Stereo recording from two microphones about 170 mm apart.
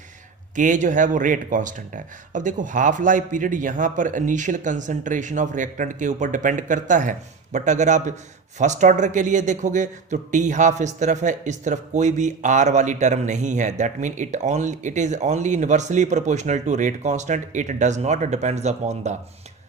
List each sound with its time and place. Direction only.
0.5 s speech: 50° right (ahead or behind)